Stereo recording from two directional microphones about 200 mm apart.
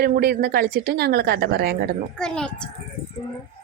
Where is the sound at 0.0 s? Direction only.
50° right (ahead or behind).